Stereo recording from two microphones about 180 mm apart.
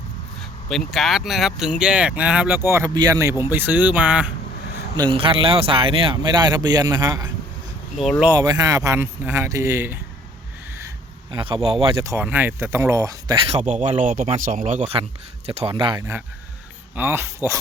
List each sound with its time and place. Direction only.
0.9 s speech: centre (ahead or behind)
4.9 s speech: 25° right (ahead or behind)
8.4 s speech: 20° right (ahead or behind)
11.3 s speech: 25° right (ahead or behind)
12.0 s speech: 10° right (ahead or behind)
13.5 s speech: 40° right (ahead or behind)
15.4 s speech: 35° right (ahead or behind)
16.9 s speech: 10° right (ahead or behind)